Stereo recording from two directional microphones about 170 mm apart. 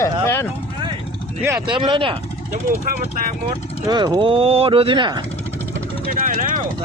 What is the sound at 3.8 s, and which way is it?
Speech, 25° right (ahead or behind).